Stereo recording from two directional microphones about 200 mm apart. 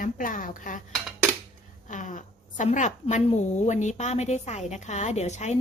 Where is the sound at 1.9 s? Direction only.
40° left (ahead or behind).